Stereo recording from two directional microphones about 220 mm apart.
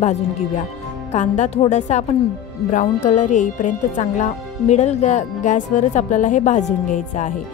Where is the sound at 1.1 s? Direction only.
30° left (ahead or behind).